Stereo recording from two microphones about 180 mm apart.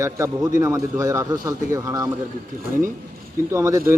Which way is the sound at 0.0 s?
15° right (ahead or behind).